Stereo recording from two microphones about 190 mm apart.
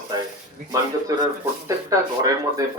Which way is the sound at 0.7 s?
20° right (ahead or behind).